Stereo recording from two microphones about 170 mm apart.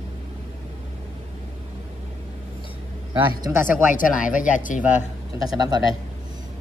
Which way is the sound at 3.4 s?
15° right (ahead or behind).